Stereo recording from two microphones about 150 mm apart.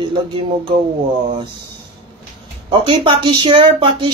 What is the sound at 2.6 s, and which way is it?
Speech, 35° right (ahead or behind).